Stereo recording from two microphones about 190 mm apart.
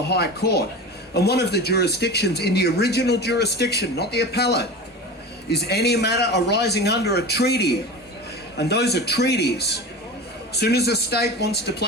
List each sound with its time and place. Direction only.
0.1 s speech: 60° left (ahead or behind)